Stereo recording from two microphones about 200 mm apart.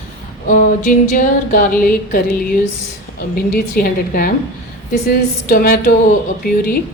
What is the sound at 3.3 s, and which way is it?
A woman's voice, 45° left (ahead or behind).